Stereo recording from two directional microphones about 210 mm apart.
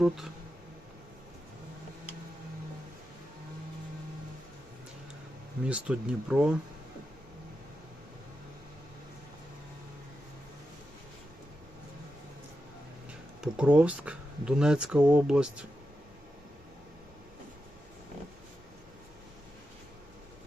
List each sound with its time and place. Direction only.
5.6 s speech: 5° right (ahead or behind)
13.4 s speech: 5° right (ahead or behind)